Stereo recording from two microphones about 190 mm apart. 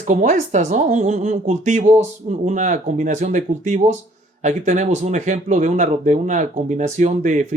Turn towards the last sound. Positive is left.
turn(degrees=-40)  # may be behind; listen again after turning